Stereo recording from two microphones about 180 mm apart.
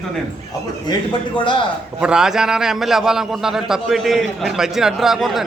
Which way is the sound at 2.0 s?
5° right (ahead or behind).